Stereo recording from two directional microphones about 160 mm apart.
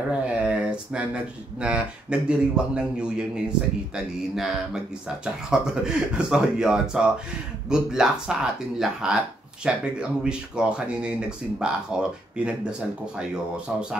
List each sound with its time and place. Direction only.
0.1 s speech: 5° right (ahead or behind)